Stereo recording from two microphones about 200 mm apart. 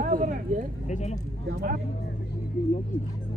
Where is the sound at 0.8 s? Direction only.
35° left (ahead or behind).